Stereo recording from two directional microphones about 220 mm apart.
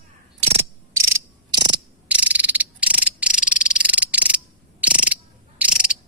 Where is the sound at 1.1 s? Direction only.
20° right (ahead or behind).